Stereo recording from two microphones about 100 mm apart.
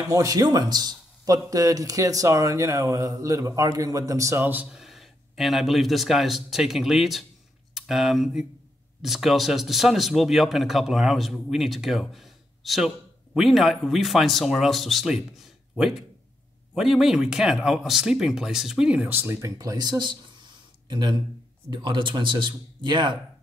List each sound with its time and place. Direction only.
0.1 s speech: 35° right (ahead or behind)
4.6 s a man's voice: 5° right (ahead or behind)
19.0 s speech: 25° right (ahead or behind); by 23.1 s 50° right (ahead or behind)